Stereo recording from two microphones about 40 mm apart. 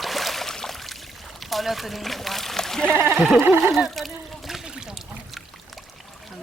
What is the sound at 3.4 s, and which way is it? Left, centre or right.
Speech, right.